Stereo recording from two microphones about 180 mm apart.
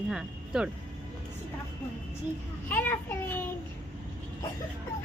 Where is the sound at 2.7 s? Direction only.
10° left (ahead or behind).